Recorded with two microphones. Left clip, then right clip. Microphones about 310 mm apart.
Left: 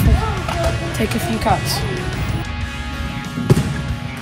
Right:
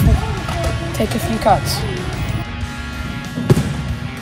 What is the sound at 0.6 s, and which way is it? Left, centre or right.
Music, centre.